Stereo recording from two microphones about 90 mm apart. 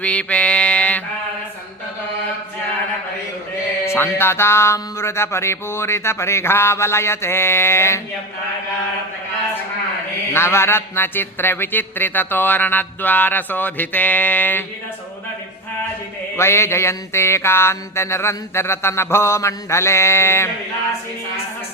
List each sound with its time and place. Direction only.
0.0 s mantra: 15° left (ahead or behind)
3.8 s speech: 25° left (ahead or behind)
10.3 s speech: 30° left (ahead or behind)
16.4 s speech: 30° left (ahead or behind)